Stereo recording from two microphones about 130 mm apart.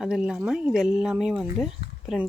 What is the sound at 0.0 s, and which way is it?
Speech, 5° right (ahead or behind).